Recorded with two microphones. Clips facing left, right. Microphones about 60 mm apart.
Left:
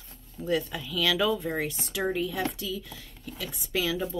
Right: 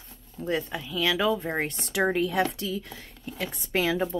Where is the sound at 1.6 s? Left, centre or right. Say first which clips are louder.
Right 4 dB; right.